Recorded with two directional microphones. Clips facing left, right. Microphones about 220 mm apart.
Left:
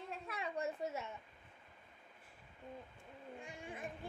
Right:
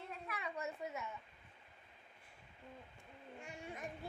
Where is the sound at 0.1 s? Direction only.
30° left (ahead or behind).